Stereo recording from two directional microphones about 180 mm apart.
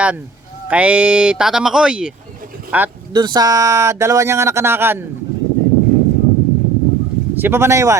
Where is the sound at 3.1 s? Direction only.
25° right (ahead or behind).